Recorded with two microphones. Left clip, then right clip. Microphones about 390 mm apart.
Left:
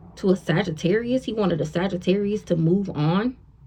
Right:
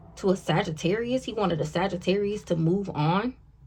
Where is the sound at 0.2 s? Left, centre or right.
Right.